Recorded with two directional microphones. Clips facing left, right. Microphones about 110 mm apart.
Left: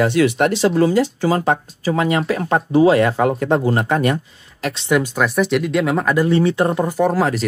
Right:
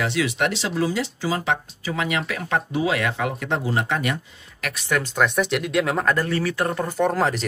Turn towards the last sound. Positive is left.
turn(degrees=0)  # may be behind; listen again after turning